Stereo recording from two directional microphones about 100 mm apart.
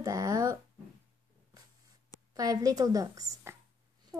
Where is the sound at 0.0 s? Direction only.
35° right (ahead or behind).